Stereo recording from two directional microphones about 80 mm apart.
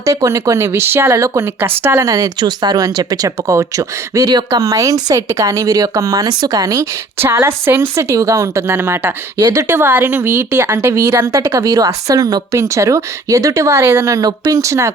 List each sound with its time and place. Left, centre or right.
0.0 s speech: right
2.0 s speech: right
7.3 s speech: right